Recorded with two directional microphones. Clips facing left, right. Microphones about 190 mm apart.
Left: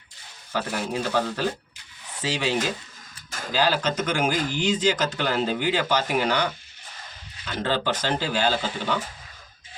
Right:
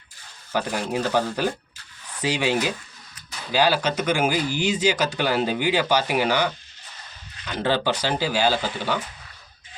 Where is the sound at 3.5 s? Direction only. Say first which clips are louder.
Right 3 dB; 10° right (ahead or behind).